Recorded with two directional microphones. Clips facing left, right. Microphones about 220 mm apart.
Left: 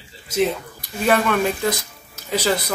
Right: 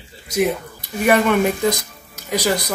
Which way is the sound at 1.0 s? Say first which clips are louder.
Right 3 dB; 15° right (ahead or behind).